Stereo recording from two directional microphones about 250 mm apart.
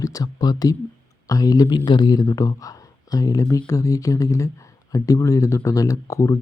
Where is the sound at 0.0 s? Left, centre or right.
Centre.